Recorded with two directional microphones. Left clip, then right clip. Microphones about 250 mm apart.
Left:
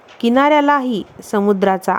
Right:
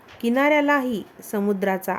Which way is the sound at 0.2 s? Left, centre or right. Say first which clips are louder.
Left 6 dB; centre.